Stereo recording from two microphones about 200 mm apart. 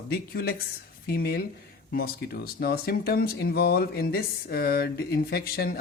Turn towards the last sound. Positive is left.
turn(degrees=50)  # may be behind; listen again after turning